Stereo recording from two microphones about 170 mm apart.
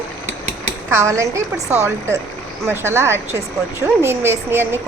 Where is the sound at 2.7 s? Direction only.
15° right (ahead or behind).